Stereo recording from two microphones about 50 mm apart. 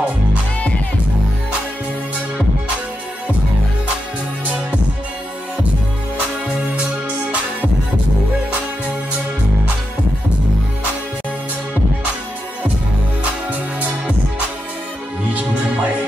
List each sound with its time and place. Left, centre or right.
13.5 s music: right
15.3 s music: right